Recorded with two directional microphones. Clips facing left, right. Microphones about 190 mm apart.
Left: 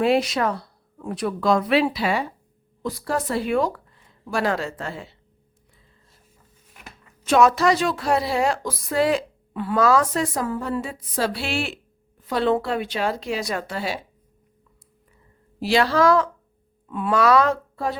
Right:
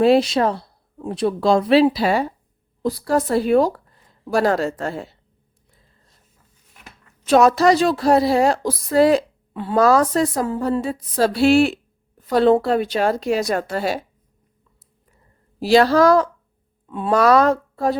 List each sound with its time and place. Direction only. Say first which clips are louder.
0.0 s speech: right 5 dB; 30° right (ahead or behind)
7.3 s a woman's voice: right 4 dB; 35° right (ahead or behind)
15.6 s speech: right 5 dB; 40° right (ahead or behind)